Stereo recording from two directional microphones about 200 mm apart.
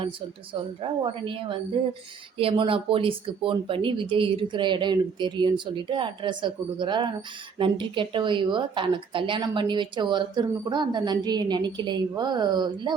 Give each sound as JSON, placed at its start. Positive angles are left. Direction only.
{"t": 0.8, "sound": "a woman's voice", "side_deg": -25}